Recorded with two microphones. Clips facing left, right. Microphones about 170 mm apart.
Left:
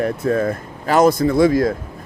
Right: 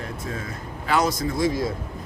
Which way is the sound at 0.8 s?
45° left (ahead or behind).